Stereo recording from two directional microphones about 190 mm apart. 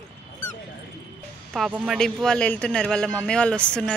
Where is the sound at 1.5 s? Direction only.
5° right (ahead or behind).